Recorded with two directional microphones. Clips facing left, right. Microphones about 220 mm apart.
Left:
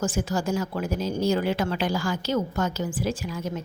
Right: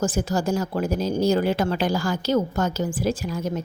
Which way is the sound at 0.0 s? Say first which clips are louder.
Right 3 dB; 35° right (ahead or behind).